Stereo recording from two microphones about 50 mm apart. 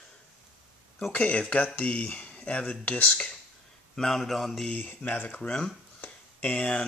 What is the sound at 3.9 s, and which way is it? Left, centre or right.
Speech, centre.